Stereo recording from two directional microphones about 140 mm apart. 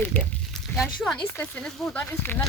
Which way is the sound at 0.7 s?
Centre (ahead or behind).